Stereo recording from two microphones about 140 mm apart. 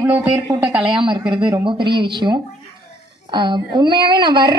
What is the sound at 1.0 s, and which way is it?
Speech, 35° right (ahead or behind).